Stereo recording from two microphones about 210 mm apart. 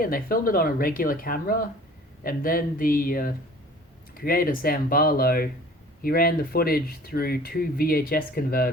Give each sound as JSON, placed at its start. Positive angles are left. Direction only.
{"t": 0.0, "sound": "speech", "side_deg": 45}